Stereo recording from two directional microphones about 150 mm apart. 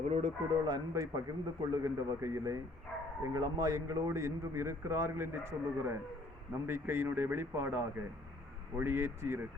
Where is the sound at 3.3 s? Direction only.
25° right (ahead or behind).